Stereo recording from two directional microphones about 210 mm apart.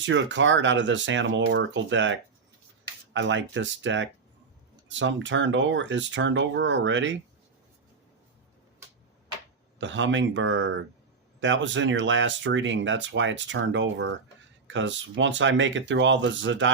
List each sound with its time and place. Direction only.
0.0 s speech: 60° right (ahead or behind)
9.7 s speech: 60° right (ahead or behind)